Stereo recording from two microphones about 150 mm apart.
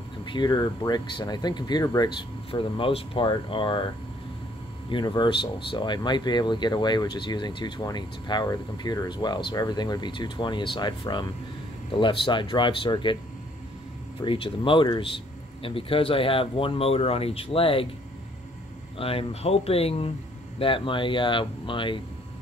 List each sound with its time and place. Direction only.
0.2 s speech: 30° left (ahead or behind)
4.8 s speech: 30° left (ahead or behind)
14.2 s speech: 35° left (ahead or behind)
18.9 s speech: 40° left (ahead or behind)